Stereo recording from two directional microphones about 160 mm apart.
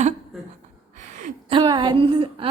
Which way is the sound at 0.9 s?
50° right (ahead or behind).